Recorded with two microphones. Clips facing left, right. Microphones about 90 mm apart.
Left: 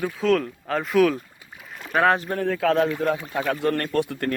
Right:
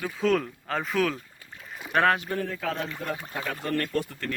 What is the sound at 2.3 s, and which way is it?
Speech, 50° left (ahead or behind).